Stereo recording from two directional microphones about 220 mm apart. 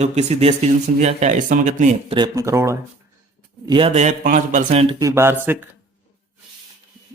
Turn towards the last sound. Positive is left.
turn(degrees=-10)  # may be behind; listen again after turning